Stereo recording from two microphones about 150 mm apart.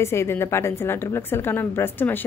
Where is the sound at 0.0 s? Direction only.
15° left (ahead or behind).